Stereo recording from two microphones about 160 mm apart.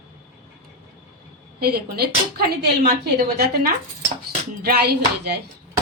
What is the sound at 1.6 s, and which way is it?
Speech, 75° right (ahead or behind).